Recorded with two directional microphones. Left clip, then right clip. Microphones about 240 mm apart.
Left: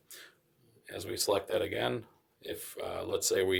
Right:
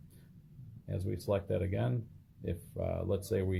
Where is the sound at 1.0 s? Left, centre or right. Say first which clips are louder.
Left 4 dB; left.